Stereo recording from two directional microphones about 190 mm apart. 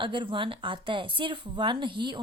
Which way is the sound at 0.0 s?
25° right (ahead or behind).